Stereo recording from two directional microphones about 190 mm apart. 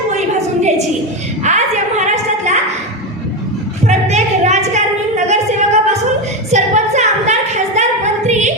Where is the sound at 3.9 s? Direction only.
35° right (ahead or behind).